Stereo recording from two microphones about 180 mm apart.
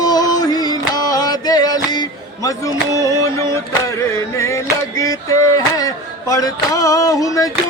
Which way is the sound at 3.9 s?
15° left (ahead or behind).